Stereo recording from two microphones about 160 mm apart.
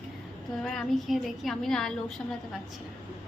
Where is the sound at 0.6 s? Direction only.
Centre (ahead or behind).